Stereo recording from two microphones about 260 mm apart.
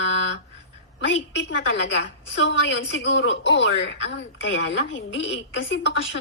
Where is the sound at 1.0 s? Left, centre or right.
Left.